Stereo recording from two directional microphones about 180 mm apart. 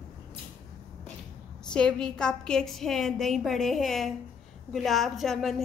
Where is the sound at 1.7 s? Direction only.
5° left (ahead or behind).